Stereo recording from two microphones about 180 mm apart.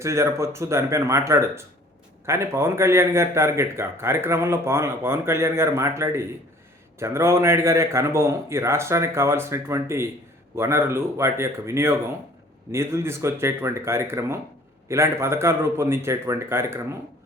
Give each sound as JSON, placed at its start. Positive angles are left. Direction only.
{"t": 0.0, "sound": "a man's voice", "side_deg": -15}